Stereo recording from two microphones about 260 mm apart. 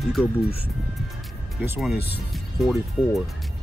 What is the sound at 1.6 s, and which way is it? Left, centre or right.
Speech, centre.